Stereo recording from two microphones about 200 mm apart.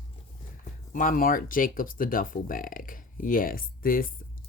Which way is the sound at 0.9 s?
40° left (ahead or behind).